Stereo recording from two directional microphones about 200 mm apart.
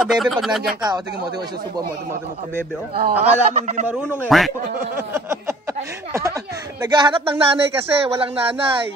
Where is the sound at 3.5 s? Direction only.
35° right (ahead or behind).